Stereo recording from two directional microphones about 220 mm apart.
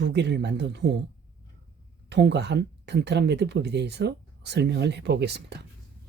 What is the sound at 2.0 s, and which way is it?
Speech, 50° right (ahead or behind).